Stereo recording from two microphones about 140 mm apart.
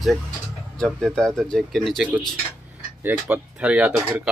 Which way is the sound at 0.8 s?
Centre (ahead or behind).